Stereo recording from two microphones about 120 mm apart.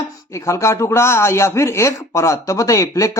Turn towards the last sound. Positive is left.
turn(degrees=25)  # may be behind; listen again after turning